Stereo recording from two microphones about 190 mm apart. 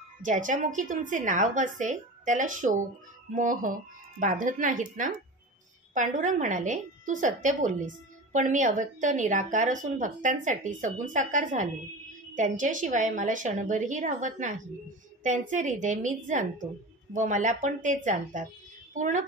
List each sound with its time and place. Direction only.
0.2 s speech: 40° right (ahead or behind)